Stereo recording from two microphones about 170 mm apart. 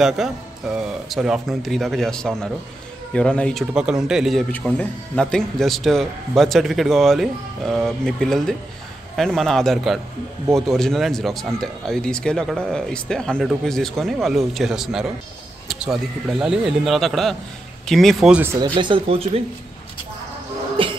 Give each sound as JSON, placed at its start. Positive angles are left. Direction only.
{"t": 0.2, "sound": "a man's voice", "side_deg": 0}
{"t": 18.5, "sound": "speech", "side_deg": -25}